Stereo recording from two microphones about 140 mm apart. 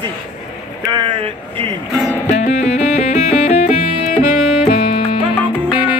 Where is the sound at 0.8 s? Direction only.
30° right (ahead or behind).